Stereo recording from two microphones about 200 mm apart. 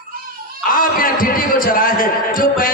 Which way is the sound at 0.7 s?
45° left (ahead or behind).